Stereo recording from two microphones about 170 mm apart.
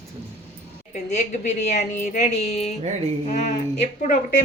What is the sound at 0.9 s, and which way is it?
A woman's voice, 45° left (ahead or behind).